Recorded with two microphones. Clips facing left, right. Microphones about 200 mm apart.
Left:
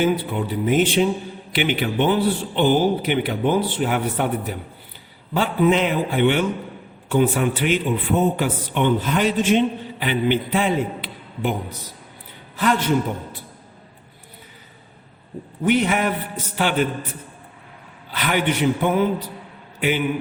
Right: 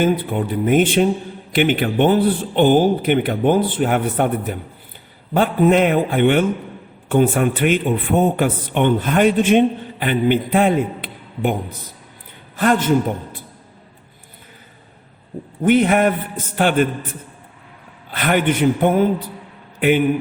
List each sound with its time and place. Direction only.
0.0 s speech: 50° right (ahead or behind)
12.5 s speech: 50° right (ahead or behind)
15.6 s speech: 50° right (ahead or behind)
18.1 s speech: 50° right (ahead or behind)